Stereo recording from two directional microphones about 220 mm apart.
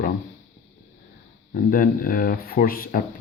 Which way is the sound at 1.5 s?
40° left (ahead or behind).